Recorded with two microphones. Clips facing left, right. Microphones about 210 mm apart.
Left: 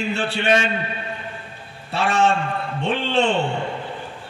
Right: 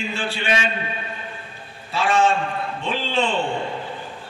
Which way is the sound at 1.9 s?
65° left (ahead or behind).